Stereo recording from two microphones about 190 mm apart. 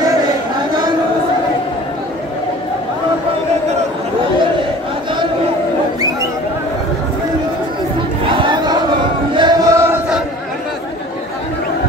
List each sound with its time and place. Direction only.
8.3 s battle cry: 25° right (ahead or behind)
9.3 s music: 20° right (ahead or behind)